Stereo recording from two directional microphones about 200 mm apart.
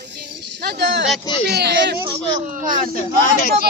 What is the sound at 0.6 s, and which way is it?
Speech, 60° right (ahead or behind).